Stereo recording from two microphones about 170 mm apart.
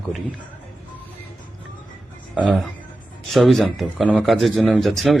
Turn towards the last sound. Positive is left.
turn(degrees=0)  # may be behind; listen again after turning